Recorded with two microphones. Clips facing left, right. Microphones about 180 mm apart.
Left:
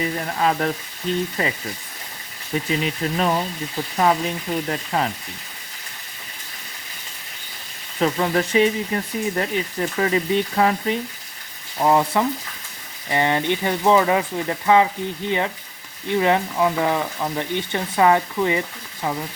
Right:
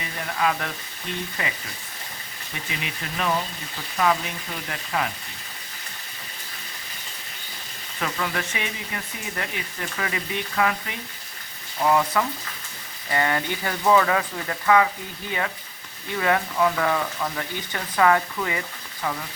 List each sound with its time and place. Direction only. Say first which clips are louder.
0.3 s speech: left 3 dB; 35° left (ahead or behind)
2.6 s speech: left 9 dB; 35° left (ahead or behind)
7.9 s speech: left 8 dB; 35° left (ahead or behind)